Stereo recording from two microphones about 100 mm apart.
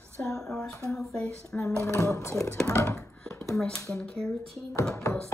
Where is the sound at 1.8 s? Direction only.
30° left (ahead or behind).